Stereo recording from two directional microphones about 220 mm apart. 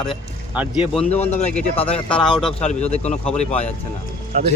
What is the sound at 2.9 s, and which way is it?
Speech, 30° left (ahead or behind).